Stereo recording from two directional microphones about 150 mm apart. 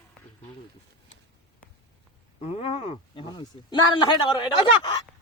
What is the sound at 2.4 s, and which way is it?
A man's voice, 40° left (ahead or behind).